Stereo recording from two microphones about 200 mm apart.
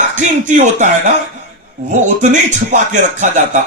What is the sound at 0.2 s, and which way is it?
Speech, 40° right (ahead or behind).